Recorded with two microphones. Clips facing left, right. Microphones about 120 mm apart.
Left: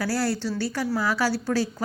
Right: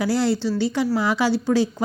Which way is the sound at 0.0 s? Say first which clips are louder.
Right 5 dB; 20° right (ahead or behind).